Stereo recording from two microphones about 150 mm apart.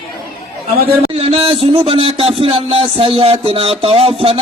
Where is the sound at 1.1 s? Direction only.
40° right (ahead or behind).